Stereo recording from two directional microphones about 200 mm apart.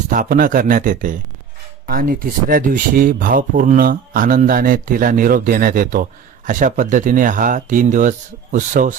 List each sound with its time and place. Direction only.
0.1 s speech: 45° right (ahead or behind)